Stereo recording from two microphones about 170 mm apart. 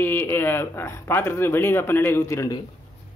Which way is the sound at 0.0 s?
15° left (ahead or behind).